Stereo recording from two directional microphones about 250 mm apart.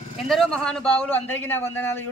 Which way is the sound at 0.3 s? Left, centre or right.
Centre.